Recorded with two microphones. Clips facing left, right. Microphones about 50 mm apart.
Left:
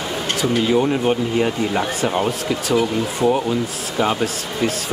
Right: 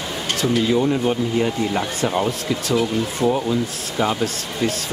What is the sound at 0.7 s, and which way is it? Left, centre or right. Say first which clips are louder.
Speech: left 1 dB; left.